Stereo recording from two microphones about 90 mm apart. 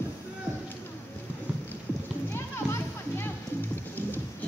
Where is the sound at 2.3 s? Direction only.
25° left (ahead or behind).